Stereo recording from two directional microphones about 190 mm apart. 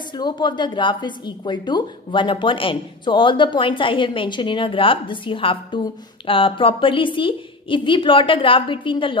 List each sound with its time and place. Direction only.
0.2 s a woman's voice: 25° left (ahead or behind)